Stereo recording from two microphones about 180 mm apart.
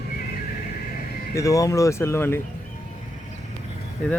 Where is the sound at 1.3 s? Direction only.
20° left (ahead or behind).